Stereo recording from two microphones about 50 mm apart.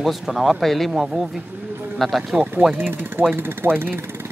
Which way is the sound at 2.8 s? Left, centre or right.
Right.